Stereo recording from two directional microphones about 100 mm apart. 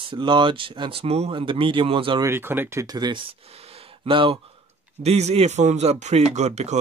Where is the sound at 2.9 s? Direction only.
45° right (ahead or behind).